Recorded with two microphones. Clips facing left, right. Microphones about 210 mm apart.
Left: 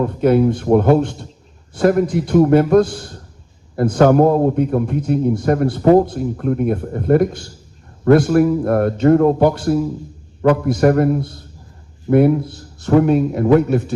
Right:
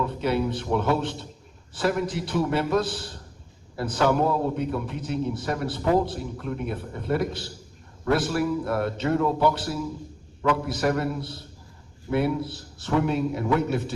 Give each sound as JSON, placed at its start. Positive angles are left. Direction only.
{"t": 0.0, "sound": "a man's voice", "side_deg": 50}